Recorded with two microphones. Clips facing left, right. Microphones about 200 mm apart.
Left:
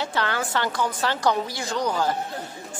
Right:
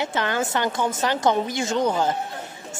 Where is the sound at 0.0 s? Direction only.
20° right (ahead or behind).